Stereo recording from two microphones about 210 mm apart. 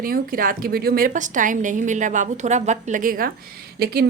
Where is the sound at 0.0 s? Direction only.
45° right (ahead or behind).